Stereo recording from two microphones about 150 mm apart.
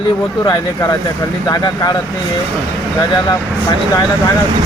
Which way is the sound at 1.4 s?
25° left (ahead or behind).